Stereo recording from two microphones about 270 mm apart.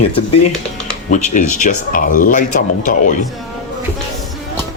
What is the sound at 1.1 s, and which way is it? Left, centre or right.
Speech, left.